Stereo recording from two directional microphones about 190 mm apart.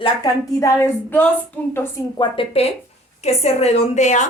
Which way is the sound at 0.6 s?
15° left (ahead or behind).